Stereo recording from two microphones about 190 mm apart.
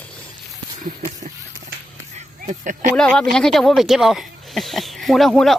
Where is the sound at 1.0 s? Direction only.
40° right (ahead or behind).